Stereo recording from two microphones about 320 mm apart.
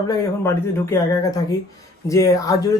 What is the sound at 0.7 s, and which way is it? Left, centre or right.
Speech, centre.